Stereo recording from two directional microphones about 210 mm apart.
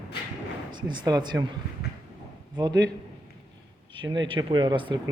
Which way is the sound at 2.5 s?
20° right (ahead or behind).